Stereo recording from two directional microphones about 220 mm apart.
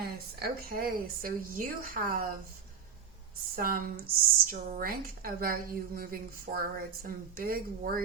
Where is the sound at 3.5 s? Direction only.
40° right (ahead or behind).